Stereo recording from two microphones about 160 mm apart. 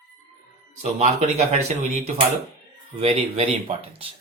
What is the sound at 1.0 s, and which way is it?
Speech, 45° right (ahead or behind).